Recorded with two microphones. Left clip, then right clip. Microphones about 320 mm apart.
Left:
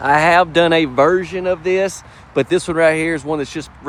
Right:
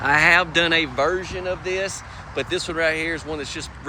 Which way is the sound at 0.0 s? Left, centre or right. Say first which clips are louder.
Left 4 dB; centre.